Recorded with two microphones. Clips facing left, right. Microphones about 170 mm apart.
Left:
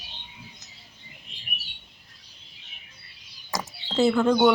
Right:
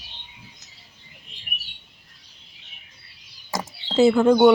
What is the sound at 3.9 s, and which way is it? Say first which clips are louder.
Speech: right 5 dB; 10° right (ahead or behind).